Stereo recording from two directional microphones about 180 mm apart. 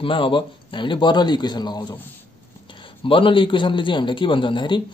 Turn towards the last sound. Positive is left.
turn(degrees=25)  # may be behind; listen again after turning